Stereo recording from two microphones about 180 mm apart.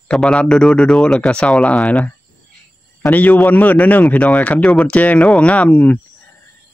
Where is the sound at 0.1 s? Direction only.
5° left (ahead or behind).